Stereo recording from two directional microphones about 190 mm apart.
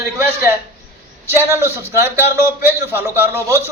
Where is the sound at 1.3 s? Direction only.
15° right (ahead or behind).